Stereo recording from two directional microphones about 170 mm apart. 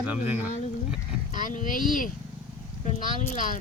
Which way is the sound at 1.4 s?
50° left (ahead or behind).